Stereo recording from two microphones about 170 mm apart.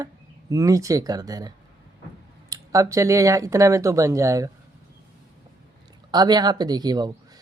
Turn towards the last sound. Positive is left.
turn(degrees=-25)  # may be behind; listen again after turning